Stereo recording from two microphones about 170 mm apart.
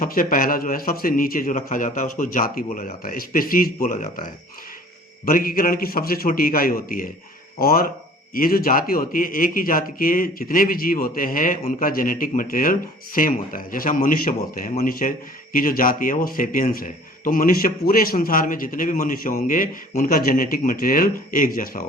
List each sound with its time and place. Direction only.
0.0 s a man's voice: 55° left (ahead or behind)